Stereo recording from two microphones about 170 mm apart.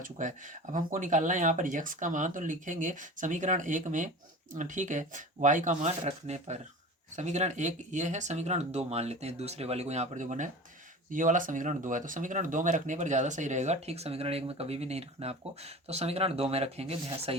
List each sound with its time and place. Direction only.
0.0 s speech: 50° right (ahead or behind)